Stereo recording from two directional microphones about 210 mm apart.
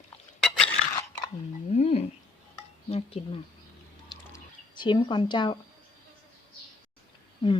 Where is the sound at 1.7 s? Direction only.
30° left (ahead or behind).